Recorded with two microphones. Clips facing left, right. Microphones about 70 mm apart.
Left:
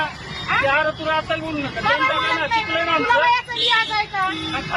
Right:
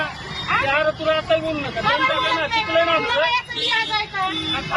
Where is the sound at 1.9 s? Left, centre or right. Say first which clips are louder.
Even; centre.